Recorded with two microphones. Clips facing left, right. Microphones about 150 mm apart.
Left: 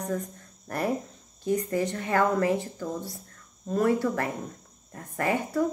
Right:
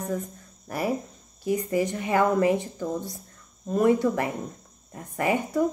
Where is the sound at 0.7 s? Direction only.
5° right (ahead or behind).